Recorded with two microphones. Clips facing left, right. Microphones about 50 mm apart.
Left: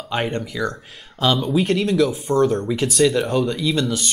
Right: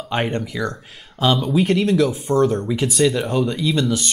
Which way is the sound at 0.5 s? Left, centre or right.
Centre.